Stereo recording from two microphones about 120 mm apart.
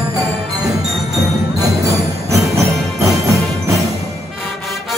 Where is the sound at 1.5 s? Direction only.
25° right (ahead or behind).